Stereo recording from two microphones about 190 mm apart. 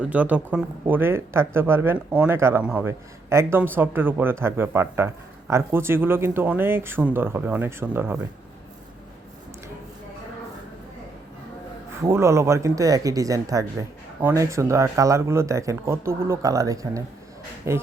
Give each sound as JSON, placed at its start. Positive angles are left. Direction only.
{"t": 0.0, "sound": "a man's voice", "side_deg": -10}
{"t": 11.9, "sound": "a man's voice", "side_deg": -15}